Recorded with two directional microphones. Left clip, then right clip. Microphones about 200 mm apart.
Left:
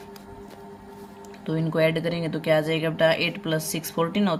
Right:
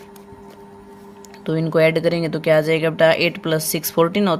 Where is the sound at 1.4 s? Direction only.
40° right (ahead or behind).